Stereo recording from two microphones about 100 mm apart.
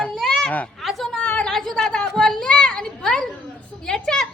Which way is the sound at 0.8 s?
Centre (ahead or behind).